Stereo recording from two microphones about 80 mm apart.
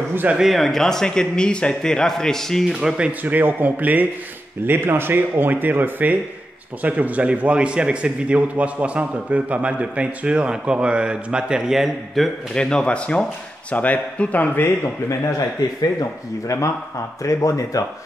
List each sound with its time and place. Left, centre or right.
0.1 s speech: right
0.4 s speech: centre
2.8 s a man's voice: centre
3.1 s a man's voice: right; by 12.3 s centre
12.5 s speech: centre; by 14.9 s left
15.8 s speech: left